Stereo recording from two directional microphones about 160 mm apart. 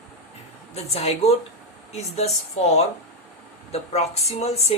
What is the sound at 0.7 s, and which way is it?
Speech, 40° left (ahead or behind).